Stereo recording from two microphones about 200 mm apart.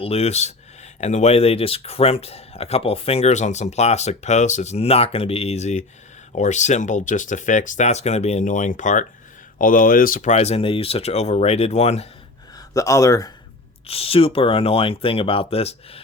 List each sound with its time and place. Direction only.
0.0 s speech: 30° left (ahead or behind)
12.7 s speech: 15° left (ahead or behind)
13.8 s speech: 30° left (ahead or behind)